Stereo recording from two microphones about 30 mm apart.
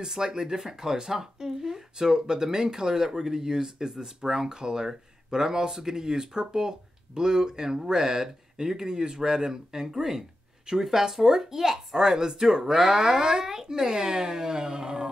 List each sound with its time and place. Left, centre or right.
0.0 s speech: right